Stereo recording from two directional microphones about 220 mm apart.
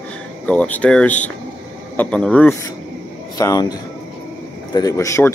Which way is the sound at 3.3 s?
15° left (ahead or behind).